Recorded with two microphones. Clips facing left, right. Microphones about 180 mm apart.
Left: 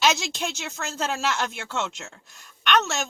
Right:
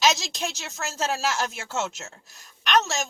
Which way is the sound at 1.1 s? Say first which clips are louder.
Even; 40° right (ahead or behind).